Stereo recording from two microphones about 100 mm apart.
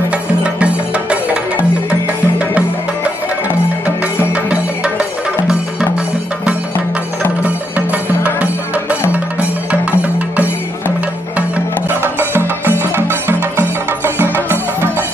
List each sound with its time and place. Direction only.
1.9 s music: 15° right (ahead or behind)
4.3 s music: 10° right (ahead or behind)
7.4 s music: 15° right (ahead or behind)